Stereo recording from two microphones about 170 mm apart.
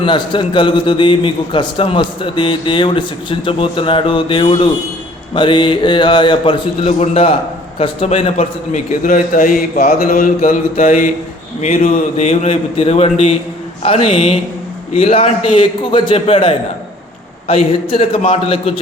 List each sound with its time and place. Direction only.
0.0 s a man's voice: 30° left (ahead or behind)
6.8 s a man's voice: 40° left (ahead or behind)
9.8 s mantra: 60° left (ahead or behind)
10.4 s a man's voice: 40° left (ahead or behind)